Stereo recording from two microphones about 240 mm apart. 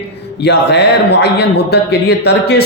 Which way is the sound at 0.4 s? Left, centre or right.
Left.